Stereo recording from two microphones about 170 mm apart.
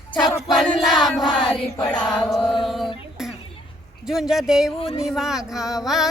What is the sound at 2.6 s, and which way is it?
A capella, centre (ahead or behind).